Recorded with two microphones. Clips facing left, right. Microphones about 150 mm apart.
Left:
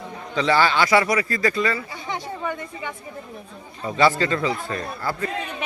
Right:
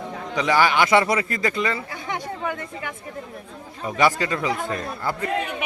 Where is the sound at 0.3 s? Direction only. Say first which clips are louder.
Even; 15° right (ahead or behind).